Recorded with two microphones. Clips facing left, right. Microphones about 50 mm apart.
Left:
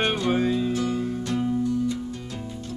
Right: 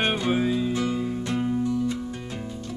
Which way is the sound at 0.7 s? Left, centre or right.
Right.